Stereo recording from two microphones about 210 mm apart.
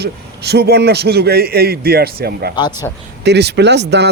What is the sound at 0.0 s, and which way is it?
A man's voice, 50° right (ahead or behind).